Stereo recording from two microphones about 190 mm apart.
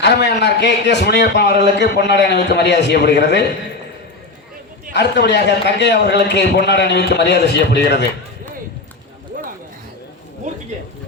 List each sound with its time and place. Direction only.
0.0 s a man's voice: 65° left (ahead or behind)
4.9 s a man's voice: 60° left (ahead or behind)